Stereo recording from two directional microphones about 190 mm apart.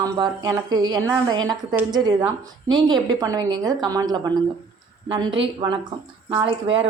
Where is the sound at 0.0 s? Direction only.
20° right (ahead or behind).